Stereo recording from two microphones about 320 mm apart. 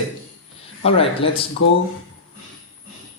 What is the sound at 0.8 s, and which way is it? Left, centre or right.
Speech, centre.